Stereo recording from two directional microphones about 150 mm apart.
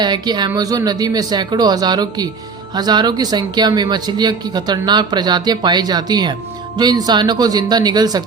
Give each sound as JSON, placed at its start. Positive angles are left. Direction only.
{"t": 0.0, "sound": "speech", "side_deg": -30}